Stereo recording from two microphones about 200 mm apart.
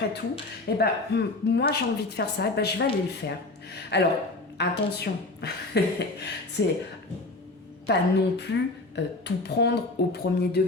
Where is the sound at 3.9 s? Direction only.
55° left (ahead or behind).